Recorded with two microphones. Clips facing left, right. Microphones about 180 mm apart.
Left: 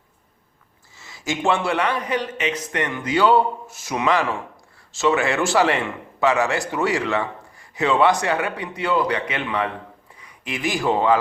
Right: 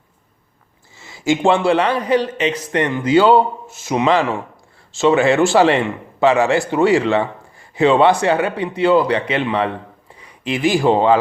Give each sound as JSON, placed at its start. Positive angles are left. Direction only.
{"t": 0.9, "sound": "a man's voice", "side_deg": -25}